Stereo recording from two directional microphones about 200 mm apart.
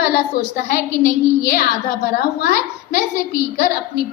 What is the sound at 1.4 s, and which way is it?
A woman's voice, 50° left (ahead or behind).